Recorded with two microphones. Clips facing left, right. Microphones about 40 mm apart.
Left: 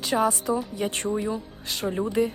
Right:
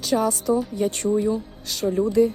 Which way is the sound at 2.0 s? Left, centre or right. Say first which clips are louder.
Right 6 dB; left.